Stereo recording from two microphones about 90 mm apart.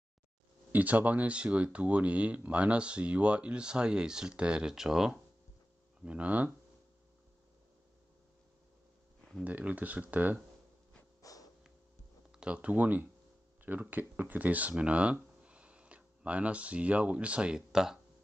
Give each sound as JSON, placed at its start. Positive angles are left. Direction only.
{"t": 0.7, "sound": "speech", "side_deg": -20}
{"t": 6.0, "sound": "speech", "side_deg": -15}
{"t": 9.4, "sound": "speech", "side_deg": -15}
{"t": 11.3, "sound": "snort", "side_deg": 40}
{"t": 12.3, "sound": "speech", "side_deg": -10}